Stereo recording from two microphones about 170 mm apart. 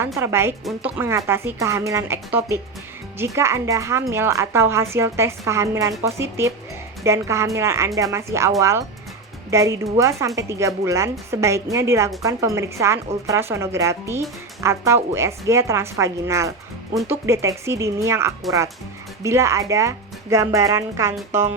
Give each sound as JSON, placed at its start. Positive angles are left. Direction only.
{"t": 0.2, "sound": "speech", "side_deg": -15}